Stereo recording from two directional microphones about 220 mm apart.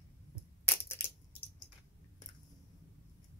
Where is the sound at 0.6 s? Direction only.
10° left (ahead or behind).